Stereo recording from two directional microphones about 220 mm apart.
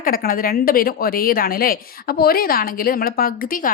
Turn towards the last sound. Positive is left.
turn(degrees=40)  # may be behind; listen again after turning